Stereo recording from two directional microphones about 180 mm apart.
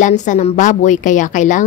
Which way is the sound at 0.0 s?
45° left (ahead or behind).